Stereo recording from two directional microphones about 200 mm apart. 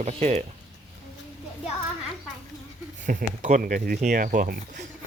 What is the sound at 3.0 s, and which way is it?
Speech, 45° right (ahead or behind).